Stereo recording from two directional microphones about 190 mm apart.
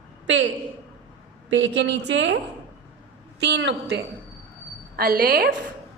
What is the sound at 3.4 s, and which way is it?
Speech, 65° right (ahead or behind).